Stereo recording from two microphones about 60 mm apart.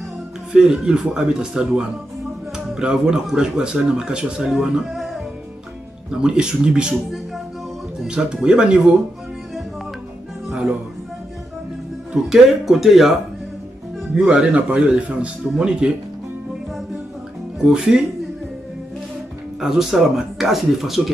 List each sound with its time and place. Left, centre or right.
0.5 s speech: centre
6.2 s speech: centre
8.1 s speech: centre
12.1 s speech: centre
14.1 s speech: centre
17.6 s speech: centre
19.6 s speech: centre